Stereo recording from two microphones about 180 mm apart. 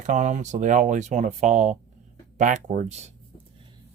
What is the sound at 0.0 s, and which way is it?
Speech, 40° right (ahead or behind).